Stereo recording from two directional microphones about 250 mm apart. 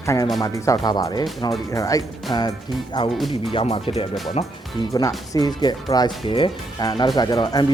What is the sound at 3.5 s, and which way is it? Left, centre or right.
Speech, left.